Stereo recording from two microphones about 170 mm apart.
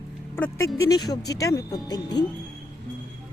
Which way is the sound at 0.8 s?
25° left (ahead or behind).